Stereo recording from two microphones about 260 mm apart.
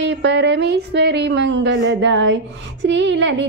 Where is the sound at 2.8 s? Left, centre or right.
Right.